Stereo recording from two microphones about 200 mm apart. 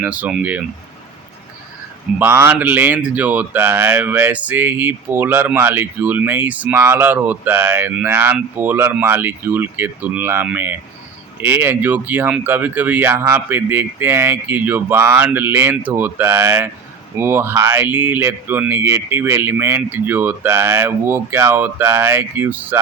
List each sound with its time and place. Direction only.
0.0 s speech: 5° right (ahead or behind)
2.1 s speech: 10° right (ahead or behind)